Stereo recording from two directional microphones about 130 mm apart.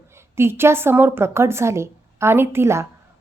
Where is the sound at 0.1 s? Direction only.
20° right (ahead or behind).